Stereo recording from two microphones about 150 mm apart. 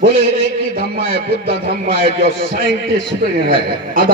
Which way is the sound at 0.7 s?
80° right.